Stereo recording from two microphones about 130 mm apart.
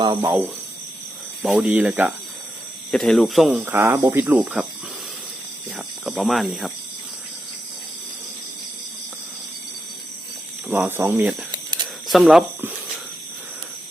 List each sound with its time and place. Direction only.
0.0 s speech: 30° right (ahead or behind)
1.4 s speech: 10° right (ahead or behind)
2.9 s speech: centre (ahead or behind)
3.6 s speech: 20° right (ahead or behind)
5.7 s speech: centre (ahead or behind)
10.7 s speech: 15° right (ahead or behind)
12.0 s speech: centre (ahead or behind)